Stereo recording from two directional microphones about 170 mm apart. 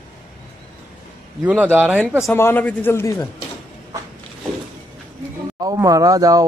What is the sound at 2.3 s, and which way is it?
Speech, 10° left (ahead or behind).